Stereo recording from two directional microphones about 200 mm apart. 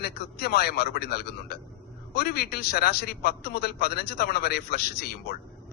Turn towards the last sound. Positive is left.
turn(degrees=50)  # may be behind; listen again after turning